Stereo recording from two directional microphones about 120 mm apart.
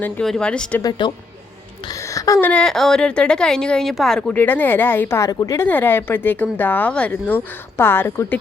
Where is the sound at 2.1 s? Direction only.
30° left (ahead or behind).